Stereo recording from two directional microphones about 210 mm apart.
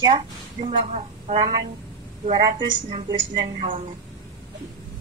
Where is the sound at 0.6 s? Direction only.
30° right (ahead or behind).